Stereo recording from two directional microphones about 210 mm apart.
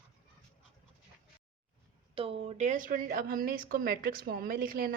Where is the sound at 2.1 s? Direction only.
25° right (ahead or behind).